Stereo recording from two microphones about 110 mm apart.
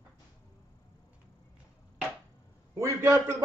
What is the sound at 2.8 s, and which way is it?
Speech, 25° right (ahead or behind).